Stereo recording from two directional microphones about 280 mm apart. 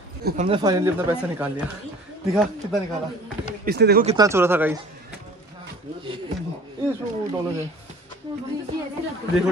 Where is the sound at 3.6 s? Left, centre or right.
Right.